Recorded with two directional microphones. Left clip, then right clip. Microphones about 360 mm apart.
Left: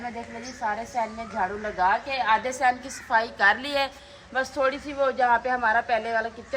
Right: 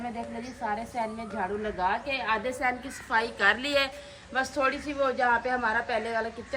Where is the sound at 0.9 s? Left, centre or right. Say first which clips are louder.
Left 4 dB; centre.